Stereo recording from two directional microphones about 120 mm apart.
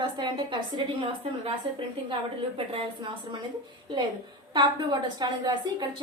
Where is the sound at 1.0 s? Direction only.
45° right (ahead or behind).